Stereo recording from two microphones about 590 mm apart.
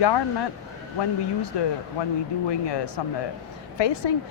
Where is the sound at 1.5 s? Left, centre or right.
Left.